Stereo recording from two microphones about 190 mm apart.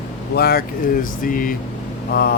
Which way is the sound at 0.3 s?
55° left (ahead or behind).